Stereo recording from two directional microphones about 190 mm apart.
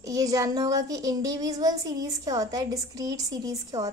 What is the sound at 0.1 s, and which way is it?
A child's voice, 20° right (ahead or behind).